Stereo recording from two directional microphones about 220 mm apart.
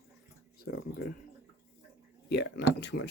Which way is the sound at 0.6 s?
45° left (ahead or behind).